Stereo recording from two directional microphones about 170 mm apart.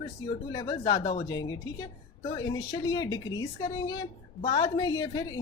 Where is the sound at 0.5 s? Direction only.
25° left (ahead or behind).